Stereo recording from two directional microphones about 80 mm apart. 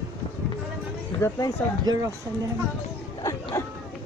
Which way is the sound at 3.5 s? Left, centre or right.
Left.